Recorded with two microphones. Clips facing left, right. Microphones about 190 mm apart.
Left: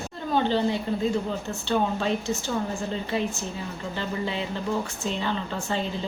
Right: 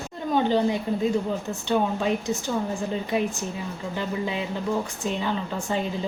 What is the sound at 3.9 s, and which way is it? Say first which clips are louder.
A woman's voice: right 1 dB; 10° right (ahead or behind).